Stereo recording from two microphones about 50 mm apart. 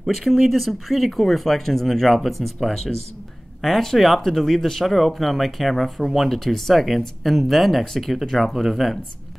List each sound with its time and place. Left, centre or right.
0.0 s speech: centre
8.1 s speech: centre